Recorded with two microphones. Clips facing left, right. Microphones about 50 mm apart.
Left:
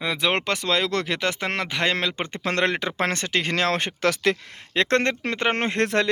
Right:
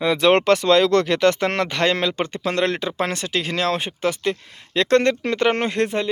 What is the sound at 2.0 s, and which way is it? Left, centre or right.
Speech, left.